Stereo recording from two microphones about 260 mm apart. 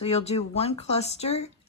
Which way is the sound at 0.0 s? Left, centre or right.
Left.